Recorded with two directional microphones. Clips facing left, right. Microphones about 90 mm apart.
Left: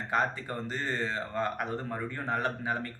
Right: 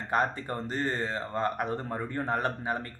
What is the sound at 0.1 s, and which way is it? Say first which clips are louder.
A man's voice: right 2 dB; 45° right (ahead or behind).